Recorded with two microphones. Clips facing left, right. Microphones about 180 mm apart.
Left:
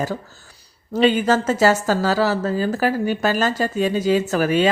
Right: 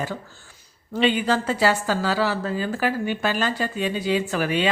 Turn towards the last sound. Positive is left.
turn(degrees=45)  # may be behind; listen again after turning